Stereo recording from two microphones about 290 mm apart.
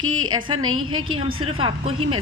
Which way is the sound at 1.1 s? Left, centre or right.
Centre.